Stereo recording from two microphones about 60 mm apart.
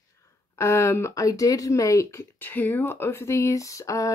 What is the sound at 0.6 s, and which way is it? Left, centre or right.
Speech, left.